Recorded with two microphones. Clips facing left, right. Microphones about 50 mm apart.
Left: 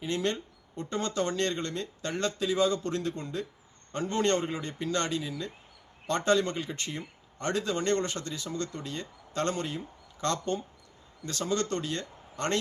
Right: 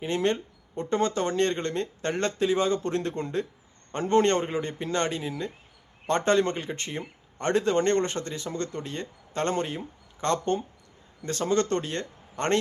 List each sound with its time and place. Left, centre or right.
0.0 s speech: right